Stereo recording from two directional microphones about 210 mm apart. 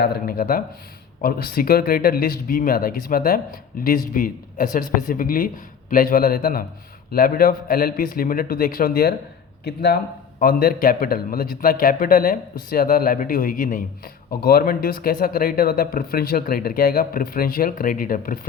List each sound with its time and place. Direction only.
0.0 s speech: 45° left (ahead or behind)